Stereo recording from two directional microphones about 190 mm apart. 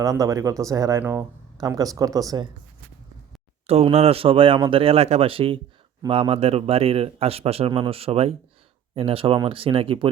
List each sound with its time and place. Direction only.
0.0 s speech: 15° right (ahead or behind)
3.7 s a man's voice: 30° right (ahead or behind)